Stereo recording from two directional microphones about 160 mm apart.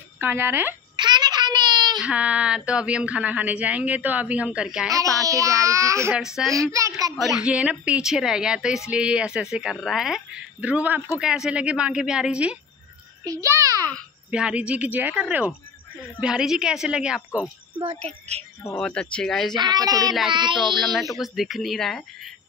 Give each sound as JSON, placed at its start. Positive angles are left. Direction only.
{"t": 0.2, "sound": "a woman's voice", "side_deg": -15}
{"t": 0.9, "sound": "a sound", "side_deg": -25}
{"t": 2.0, "sound": "a woman's voice", "side_deg": -5}
{"t": 4.9, "sound": "a child's voice", "side_deg": -20}
{"t": 7.2, "sound": "speech", "side_deg": 0}
{"t": 13.2, "sound": "a sound", "side_deg": -20}
{"t": 14.3, "sound": "a woman's voice", "side_deg": -5}
{"t": 17.7, "sound": "a woman's voice", "side_deg": -40}
{"t": 18.8, "sound": "speech", "side_deg": 5}
{"t": 19.6, "sound": "a child's voice", "side_deg": -25}
{"t": 20.1, "sound": "speech", "side_deg": 0}